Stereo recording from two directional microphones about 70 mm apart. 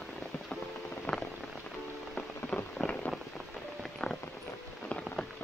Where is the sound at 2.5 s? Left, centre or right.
Centre.